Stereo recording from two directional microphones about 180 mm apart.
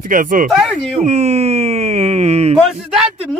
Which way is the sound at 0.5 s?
Centre (ahead or behind).